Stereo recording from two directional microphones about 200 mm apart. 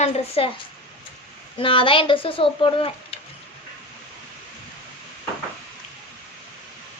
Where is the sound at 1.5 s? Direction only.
25° left (ahead or behind).